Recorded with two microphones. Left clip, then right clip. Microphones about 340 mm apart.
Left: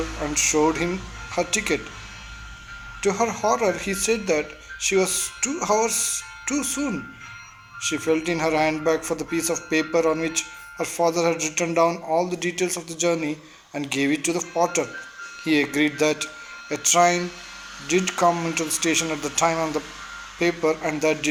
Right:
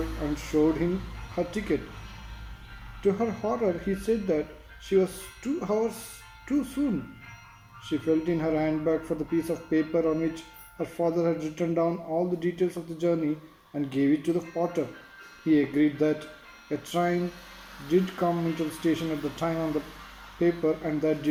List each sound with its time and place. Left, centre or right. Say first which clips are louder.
0.3 s speech: left 5 dB; left
3.0 s speech: left 5 dB; left